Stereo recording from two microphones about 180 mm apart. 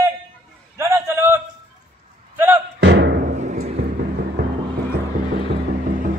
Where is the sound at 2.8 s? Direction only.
70° right (ahead or behind).